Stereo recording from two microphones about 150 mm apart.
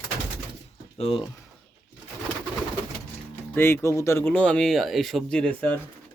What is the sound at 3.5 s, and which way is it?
Speech, 15° left (ahead or behind).